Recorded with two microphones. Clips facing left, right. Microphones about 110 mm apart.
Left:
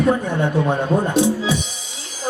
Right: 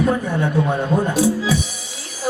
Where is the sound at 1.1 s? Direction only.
25° left (ahead or behind).